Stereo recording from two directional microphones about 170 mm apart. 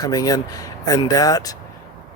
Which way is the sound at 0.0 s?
20° left (ahead or behind).